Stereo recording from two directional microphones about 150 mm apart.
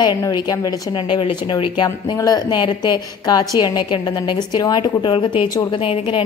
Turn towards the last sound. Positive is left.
turn(degrees=35)  # may be behind; listen again after turning